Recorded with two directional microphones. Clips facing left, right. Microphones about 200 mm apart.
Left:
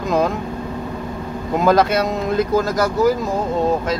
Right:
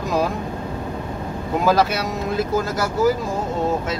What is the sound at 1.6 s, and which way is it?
Speech, 5° right (ahead or behind).